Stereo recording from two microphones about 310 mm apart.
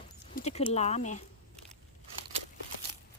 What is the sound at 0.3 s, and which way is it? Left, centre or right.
Speech, centre.